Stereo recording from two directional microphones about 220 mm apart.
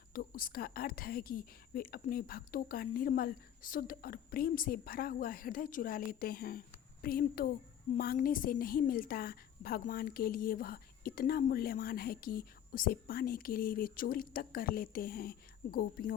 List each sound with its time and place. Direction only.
0.1 s a woman's voice: 40° left (ahead or behind)